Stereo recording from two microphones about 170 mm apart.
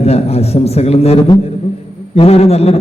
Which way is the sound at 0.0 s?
35° left (ahead or behind).